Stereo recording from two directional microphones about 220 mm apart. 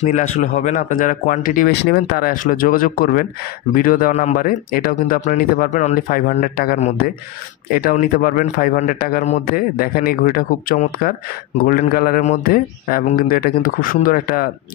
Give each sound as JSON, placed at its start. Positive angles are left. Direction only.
{"t": 0.0, "sound": "speech", "side_deg": 35}